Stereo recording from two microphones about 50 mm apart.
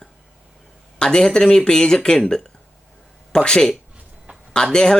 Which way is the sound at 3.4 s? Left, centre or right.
Centre.